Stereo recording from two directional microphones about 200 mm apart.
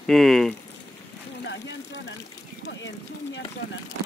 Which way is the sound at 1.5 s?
60° left (ahead or behind).